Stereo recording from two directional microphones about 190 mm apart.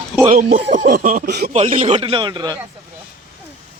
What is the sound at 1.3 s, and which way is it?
Speech, 60° right (ahead or behind).